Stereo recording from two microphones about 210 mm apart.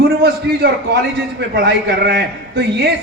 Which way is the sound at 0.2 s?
50° right (ahead or behind).